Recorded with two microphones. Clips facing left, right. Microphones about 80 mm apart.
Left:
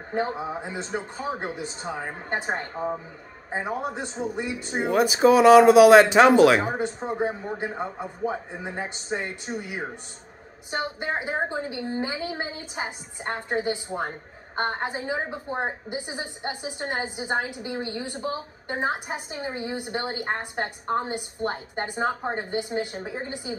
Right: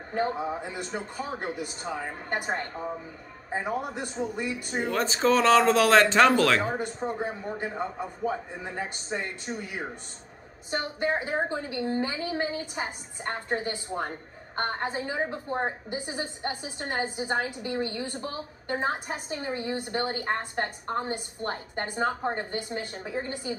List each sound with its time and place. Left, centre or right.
0.1 s a woman's voice: centre